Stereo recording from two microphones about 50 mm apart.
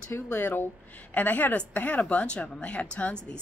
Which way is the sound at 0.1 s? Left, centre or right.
Left.